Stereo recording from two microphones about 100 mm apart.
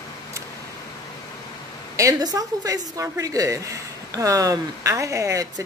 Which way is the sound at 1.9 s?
35° right (ahead or behind).